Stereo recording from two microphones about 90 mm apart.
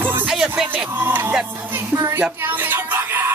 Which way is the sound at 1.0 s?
25° right (ahead or behind).